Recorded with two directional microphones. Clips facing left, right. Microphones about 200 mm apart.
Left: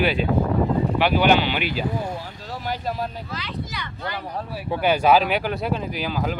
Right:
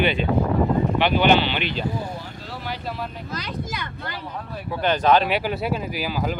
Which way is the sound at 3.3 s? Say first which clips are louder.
Right 2 dB; 45° right (ahead or behind).